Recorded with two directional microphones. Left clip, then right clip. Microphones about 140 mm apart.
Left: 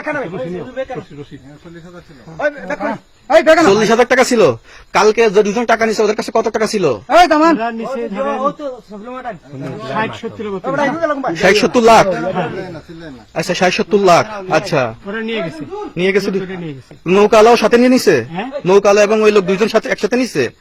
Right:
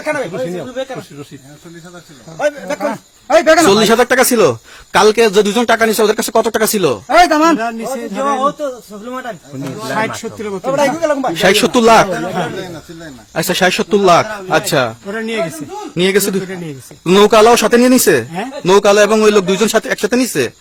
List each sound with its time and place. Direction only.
2.4 s a man's voice: 5° right (ahead or behind)
3.8 s speech: 25° right (ahead or behind)
4.9 s speech: 30° right (ahead or behind)
7.1 s a man's voice: centre (ahead or behind)
7.6 s speech: 15° right (ahead or behind)
9.8 s speech: 15° right (ahead or behind)
11.3 s speech: 30° right (ahead or behind)
12.4 s a man's voice: centre (ahead or behind)
13.3 s speech: 30° right (ahead or behind)
15.0 s speech: 15° right (ahead or behind)
16.0 s speech: 30° right (ahead or behind)